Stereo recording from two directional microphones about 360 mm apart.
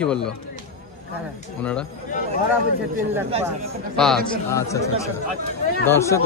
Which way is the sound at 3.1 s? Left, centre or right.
Centre.